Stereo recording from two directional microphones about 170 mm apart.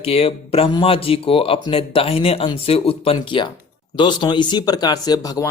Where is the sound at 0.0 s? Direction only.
35° left (ahead or behind).